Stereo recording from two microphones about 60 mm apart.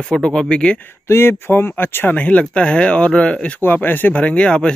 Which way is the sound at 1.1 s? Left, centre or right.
Left.